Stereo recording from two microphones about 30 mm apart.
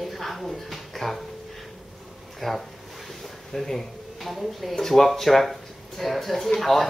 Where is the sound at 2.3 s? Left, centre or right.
Centre.